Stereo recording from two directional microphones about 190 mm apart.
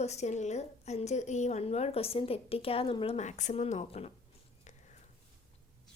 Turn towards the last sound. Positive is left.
turn(degrees=35)  # may be behind; listen again after turning